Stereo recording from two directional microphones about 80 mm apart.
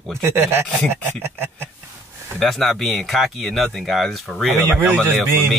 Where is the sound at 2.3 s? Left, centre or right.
Centre.